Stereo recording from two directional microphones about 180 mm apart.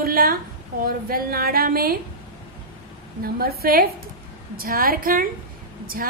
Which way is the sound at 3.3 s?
55° right (ahead or behind).